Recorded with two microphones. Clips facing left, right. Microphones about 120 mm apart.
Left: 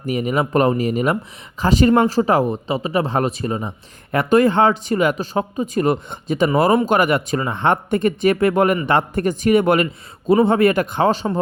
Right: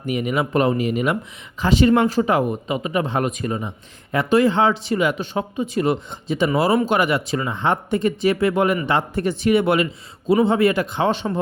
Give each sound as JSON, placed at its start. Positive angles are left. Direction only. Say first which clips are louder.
{"t": 0.0, "sound": "speech", "louder": "left 2 dB", "side_deg": 40}
{"t": 4.1, "sound": "speech", "louder": "left 2 dB", "side_deg": 50}